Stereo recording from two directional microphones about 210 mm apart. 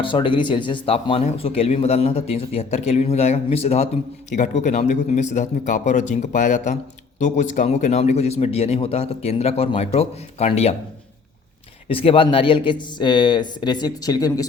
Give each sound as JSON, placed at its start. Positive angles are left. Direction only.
{"t": 0.0, "sound": "speech", "side_deg": 25}
{"t": 11.9, "sound": "speech", "side_deg": 25}